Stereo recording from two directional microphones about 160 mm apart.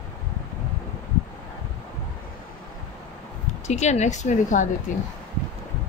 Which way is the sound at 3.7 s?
45° left (ahead or behind).